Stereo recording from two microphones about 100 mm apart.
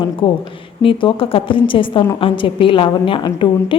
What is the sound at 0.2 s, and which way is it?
A woman's voice, 65° left (ahead or behind).